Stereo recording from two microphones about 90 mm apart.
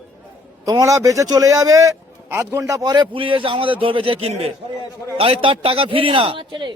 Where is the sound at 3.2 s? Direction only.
80° right.